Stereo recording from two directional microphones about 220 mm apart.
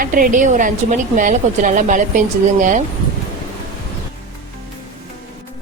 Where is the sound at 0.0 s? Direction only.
40° right (ahead or behind).